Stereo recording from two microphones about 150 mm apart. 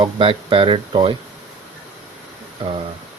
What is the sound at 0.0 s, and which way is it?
Speech, 35° right (ahead or behind).